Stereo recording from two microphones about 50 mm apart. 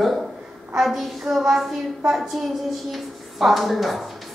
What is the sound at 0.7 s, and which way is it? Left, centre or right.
Speech, centre.